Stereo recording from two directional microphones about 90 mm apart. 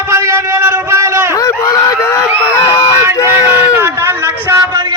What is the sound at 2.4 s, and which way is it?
Crowd, 40° left (ahead or behind).